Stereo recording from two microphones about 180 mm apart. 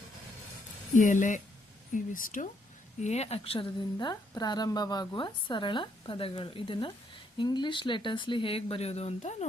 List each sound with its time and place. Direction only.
0.9 s speech: 45° left (ahead or behind)
3.0 s speech: 40° left (ahead or behind)
3.9 s a woman's voice: 20° left (ahead or behind); by 9.5 s 35° left (ahead or behind)